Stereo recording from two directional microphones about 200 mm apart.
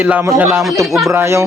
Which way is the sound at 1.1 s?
15° right (ahead or behind).